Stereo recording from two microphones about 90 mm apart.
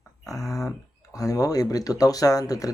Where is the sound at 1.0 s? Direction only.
40° left (ahead or behind).